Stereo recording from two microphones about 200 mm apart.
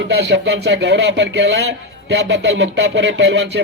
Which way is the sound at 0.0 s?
55° right (ahead or behind).